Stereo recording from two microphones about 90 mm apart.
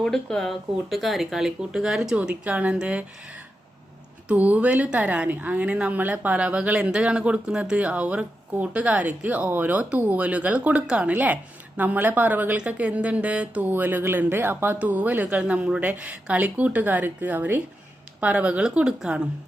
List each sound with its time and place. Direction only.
0.0 s a woman's voice: 5° left (ahead or behind); by 3.0 s 10° right (ahead or behind)
4.3 s a woman's voice: 15° right (ahead or behind)